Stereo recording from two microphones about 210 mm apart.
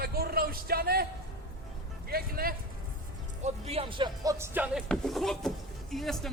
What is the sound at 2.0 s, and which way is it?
Speech, 45° right (ahead or behind).